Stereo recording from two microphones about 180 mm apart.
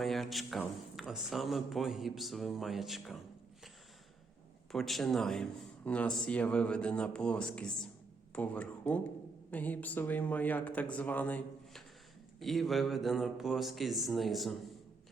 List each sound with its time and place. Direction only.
0.0 s a man's voice: centre (ahead or behind)
4.7 s a man's voice: centre (ahead or behind)